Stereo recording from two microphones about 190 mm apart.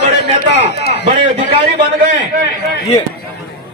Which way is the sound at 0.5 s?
60° left (ahead or behind).